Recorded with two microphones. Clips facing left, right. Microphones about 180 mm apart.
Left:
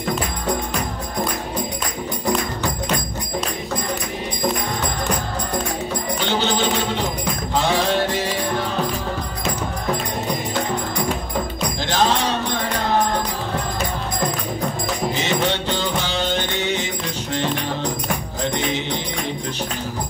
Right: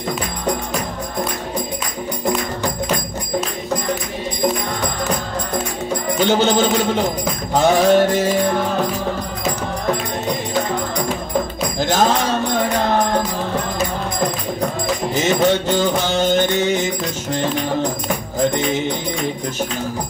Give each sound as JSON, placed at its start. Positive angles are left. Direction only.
{"t": 6.2, "sound": "music", "side_deg": -45}
{"t": 11.8, "sound": "music", "side_deg": -45}
{"t": 15.1, "sound": "music", "side_deg": -45}